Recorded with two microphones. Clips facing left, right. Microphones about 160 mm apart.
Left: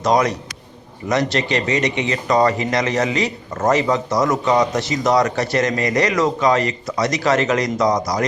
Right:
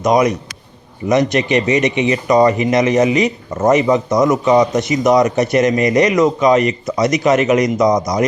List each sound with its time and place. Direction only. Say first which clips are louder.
0.0 s speech: right 4 dB; 20° right (ahead or behind)